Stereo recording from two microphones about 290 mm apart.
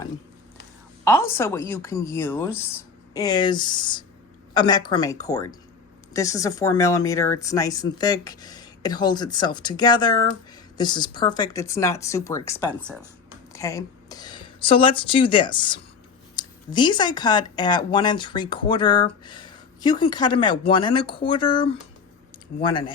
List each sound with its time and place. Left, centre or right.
1.0 s speech: centre
12.8 s speech: centre
13.5 s speech: centre